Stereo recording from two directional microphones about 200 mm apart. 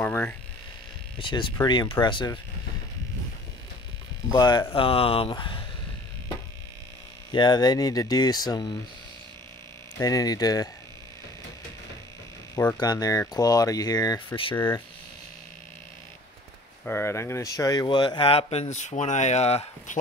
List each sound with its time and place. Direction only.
0.0 s a sound: 10° left (ahead or behind)
1.2 s speech: 25° left (ahead or behind)
4.3 s speech: 20° left (ahead or behind)
7.3 s speech: 20° left (ahead or behind)
9.9 s speech: 20° left (ahead or behind)
12.5 s speech: 15° left (ahead or behind)
16.8 s speech: 10° left (ahead or behind); by 20.0 s 30° left (ahead or behind)